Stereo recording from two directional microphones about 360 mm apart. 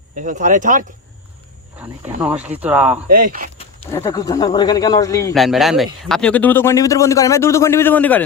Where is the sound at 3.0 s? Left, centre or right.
Right.